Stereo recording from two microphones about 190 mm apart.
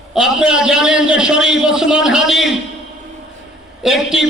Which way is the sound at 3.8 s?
Centre (ahead or behind).